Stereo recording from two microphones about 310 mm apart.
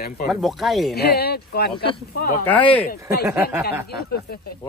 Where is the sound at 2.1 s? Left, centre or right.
Left.